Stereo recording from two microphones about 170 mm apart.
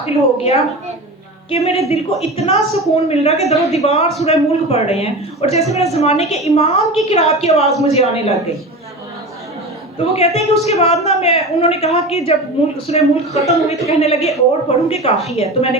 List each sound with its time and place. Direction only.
0.0 s a woman's voice: 40° left (ahead or behind)
10.0 s a woman's voice: 35° left (ahead or behind)